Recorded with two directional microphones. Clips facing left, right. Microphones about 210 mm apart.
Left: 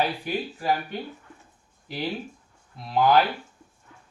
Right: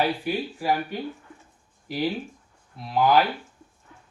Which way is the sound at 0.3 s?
5° right (ahead or behind).